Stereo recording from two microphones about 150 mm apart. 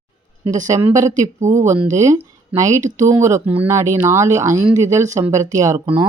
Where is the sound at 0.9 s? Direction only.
20° right (ahead or behind).